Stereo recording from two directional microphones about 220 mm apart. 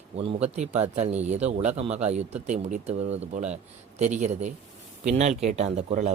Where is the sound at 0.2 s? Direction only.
25° right (ahead or behind).